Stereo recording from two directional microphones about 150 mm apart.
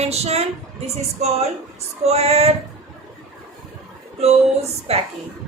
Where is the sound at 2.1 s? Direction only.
45° right (ahead or behind).